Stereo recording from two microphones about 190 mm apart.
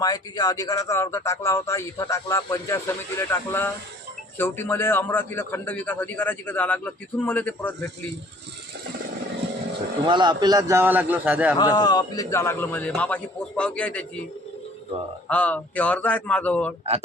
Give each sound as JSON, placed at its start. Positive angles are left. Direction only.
{"t": 0.0, "sound": "a man's voice", "side_deg": 20}
{"t": 10.1, "sound": "a man's voice", "side_deg": -25}
{"t": 11.5, "sound": "a man's voice", "side_deg": 20}
{"t": 15.3, "sound": "a man's voice", "side_deg": 5}